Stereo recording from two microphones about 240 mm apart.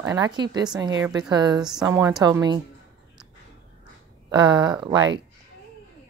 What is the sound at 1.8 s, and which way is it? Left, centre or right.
Speech, centre.